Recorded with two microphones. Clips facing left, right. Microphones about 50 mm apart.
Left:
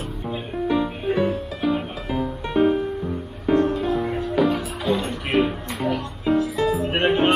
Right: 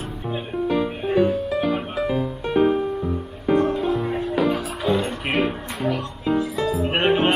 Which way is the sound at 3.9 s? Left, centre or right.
Centre.